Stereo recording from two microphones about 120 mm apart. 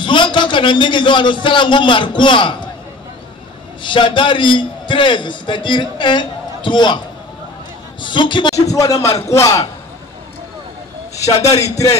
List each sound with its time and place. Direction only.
0.0 s a man's voice: 40° left (ahead or behind)
3.8 s a man's voice: 40° left (ahead or behind)
8.0 s a man's voice: 40° left (ahead or behind)
8.7 s a man's voice: 25° left (ahead or behind)
11.1 s a man's voice: 30° left (ahead or behind)